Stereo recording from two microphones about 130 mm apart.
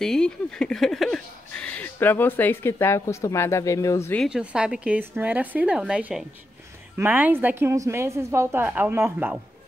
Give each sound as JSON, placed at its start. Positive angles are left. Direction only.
{"t": 0.0, "sound": "speech", "side_deg": 5}
{"t": 4.3, "sound": "a woman's voice", "side_deg": -5}